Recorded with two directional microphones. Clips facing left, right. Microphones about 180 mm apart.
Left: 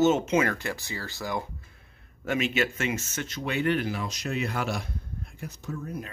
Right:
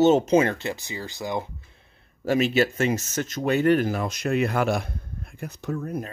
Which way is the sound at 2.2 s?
35° right (ahead or behind).